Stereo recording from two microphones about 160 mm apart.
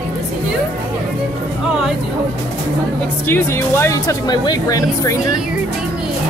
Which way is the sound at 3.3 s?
15° left (ahead or behind).